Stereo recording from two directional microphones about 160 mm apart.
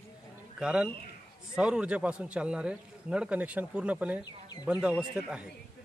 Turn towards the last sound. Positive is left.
turn(degrees=-5)  # may be behind; listen again after turning